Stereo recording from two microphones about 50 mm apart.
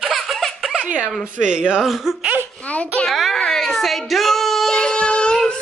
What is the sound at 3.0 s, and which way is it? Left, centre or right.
Baby cry, centre.